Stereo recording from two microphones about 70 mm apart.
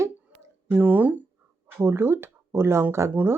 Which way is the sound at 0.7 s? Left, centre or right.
Right.